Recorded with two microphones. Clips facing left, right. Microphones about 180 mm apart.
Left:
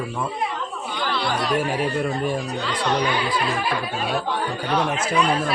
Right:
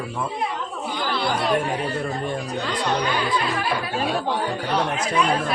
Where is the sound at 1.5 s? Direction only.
5° left (ahead or behind).